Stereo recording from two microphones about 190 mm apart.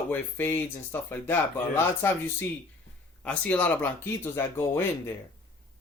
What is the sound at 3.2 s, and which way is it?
Speech, 5° left (ahead or behind).